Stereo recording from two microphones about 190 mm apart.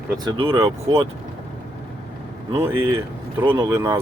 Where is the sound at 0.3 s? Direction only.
25° right (ahead or behind).